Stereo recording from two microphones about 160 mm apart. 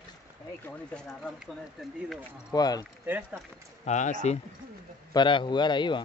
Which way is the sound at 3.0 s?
10° right (ahead or behind).